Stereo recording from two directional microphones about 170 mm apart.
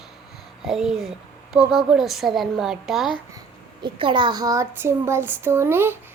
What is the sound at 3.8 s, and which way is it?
Speech, 30° right (ahead or behind).